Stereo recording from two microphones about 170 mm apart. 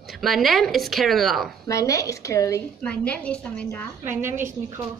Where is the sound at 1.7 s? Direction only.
20° left (ahead or behind).